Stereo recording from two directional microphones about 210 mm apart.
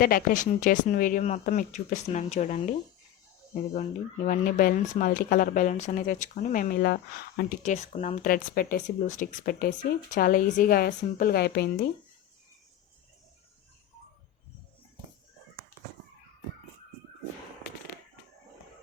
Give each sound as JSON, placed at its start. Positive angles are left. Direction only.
{"t": 0.0, "sound": "speech", "side_deg": 45}
{"t": 3.8, "sound": "speech", "side_deg": 35}
{"t": 7.6, "sound": "a woman's voice", "side_deg": 35}